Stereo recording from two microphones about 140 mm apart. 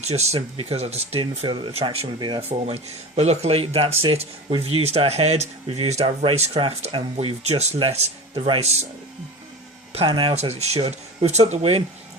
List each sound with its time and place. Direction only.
0.0 s speech: 50° right (ahead or behind); by 2.4 s 30° right (ahead or behind)
2.5 s speech: 45° right (ahead or behind)
9.9 s speech: 40° right (ahead or behind)
10.4 s speech: 50° right (ahead or behind)